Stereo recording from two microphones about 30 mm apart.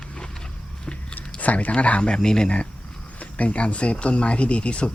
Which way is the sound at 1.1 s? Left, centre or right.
Left.